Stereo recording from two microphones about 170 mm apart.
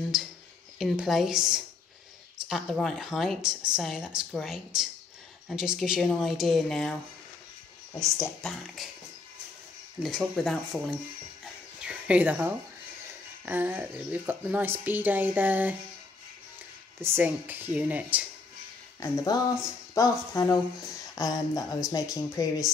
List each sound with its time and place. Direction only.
0.1 s a sound: 5° right (ahead or behind)
0.7 s speech: centre (ahead or behind)
8.4 s speech: 5° left (ahead or behind)
10.0 s speech: centre (ahead or behind)
17.0 s speech: 10° right (ahead or behind)
19.0 s speech: 15° left (ahead or behind)